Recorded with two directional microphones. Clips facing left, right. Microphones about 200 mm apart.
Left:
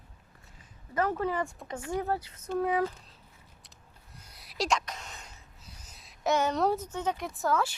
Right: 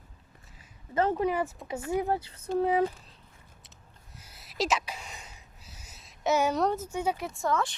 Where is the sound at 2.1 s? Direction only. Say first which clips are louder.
Right 3 dB; 30° right (ahead or behind).